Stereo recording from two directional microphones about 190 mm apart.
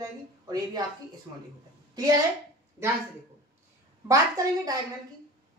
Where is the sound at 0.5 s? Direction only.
20° right (ahead or behind).